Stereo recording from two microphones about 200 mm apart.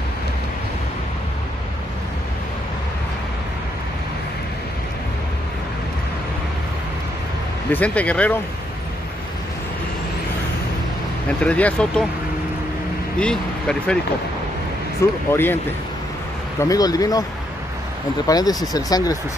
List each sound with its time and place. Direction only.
7.7 s speech: 5° left (ahead or behind)
11.2 s speech: 5° left (ahead or behind)
13.2 s speech: 5° left (ahead or behind)
15.0 s speech: 15° left (ahead or behind)
18.2 s speech: 20° left (ahead or behind)